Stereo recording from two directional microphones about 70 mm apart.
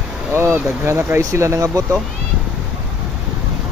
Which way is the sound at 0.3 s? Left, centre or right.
Right.